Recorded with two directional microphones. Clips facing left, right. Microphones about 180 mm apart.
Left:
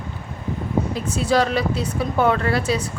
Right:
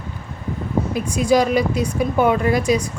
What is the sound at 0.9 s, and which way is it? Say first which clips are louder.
A woman's voice: right 4 dB; 10° right (ahead or behind).